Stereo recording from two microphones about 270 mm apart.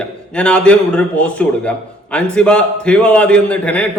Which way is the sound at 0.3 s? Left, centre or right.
Centre.